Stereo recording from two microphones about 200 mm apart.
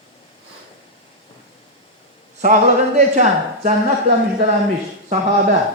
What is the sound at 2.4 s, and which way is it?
A man's voice, 40° right (ahead or behind).